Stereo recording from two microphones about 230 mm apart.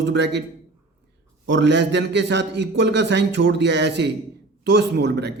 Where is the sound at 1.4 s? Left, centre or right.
Right.